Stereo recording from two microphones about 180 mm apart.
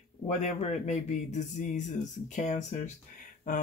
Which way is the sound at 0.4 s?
40° left (ahead or behind).